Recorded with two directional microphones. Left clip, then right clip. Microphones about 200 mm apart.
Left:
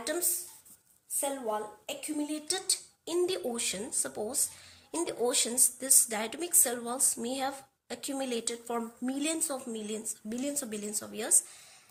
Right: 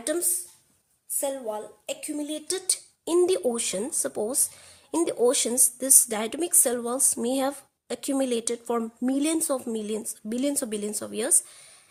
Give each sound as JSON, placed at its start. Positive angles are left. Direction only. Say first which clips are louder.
{"t": 0.0, "sound": "a woman's voice", "louder": "right 5 dB", "side_deg": -50}